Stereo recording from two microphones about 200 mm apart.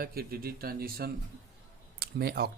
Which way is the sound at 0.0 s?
50° right (ahead or behind).